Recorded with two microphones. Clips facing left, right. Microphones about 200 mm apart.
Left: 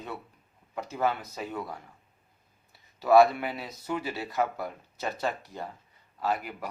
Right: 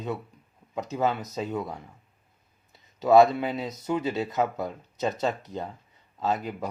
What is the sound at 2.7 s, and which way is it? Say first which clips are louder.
Speech: right 2 dB; 20° right (ahead or behind).